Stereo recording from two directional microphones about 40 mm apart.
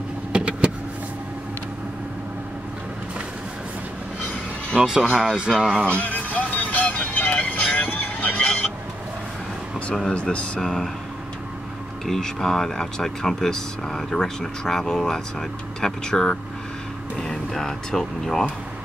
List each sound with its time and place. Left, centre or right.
0.3 s vehicle: right
5.0 s speech: right
5.9 s a sound: left
6.5 s music: left
7.3 s speech: left
7.8 s vehicle: left
8.4 s speech: left
10.1 s speech: left
10.6 s speech: centre
12.1 s speech: centre